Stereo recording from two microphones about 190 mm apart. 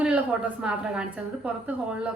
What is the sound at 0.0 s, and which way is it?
A woman's voice, 5° right (ahead or behind).